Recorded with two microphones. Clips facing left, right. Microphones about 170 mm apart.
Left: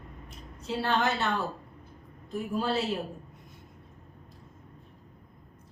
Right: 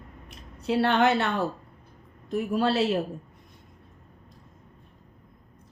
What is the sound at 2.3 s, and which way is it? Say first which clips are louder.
Speech: right 5 dB; 75° right (ahead or behind).